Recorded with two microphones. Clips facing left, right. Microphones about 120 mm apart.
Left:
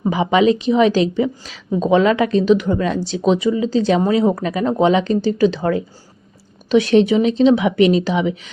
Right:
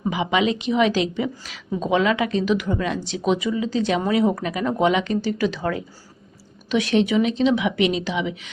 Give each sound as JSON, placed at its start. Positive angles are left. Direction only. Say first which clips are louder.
{"t": 0.0, "sound": "a woman's voice", "louder": "left 6 dB", "side_deg": 40}